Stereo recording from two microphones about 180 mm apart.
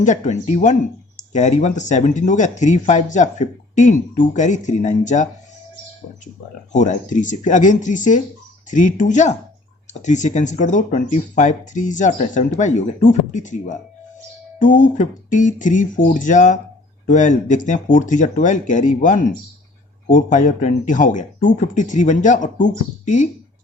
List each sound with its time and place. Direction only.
0.0 s speech: 40° left (ahead or behind)
6.7 s speech: 45° left (ahead or behind)